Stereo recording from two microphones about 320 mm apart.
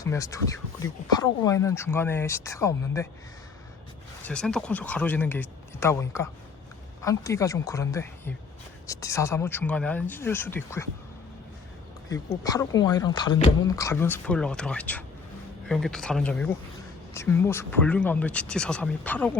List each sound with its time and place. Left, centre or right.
0.0 s speech: centre
4.2 s speech: centre
12.0 s speech: centre